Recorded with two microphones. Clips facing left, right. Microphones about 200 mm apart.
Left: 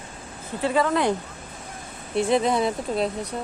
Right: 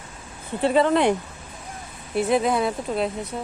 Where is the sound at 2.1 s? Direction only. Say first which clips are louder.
Even; 5° right (ahead or behind).